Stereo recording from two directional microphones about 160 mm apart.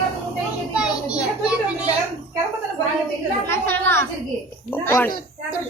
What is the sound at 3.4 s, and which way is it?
A woman's voice, 15° left (ahead or behind).